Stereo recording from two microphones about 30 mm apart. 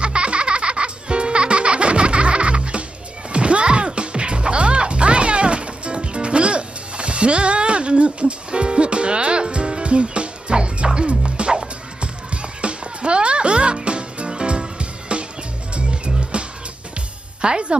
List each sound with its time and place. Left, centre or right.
0.0 s music: right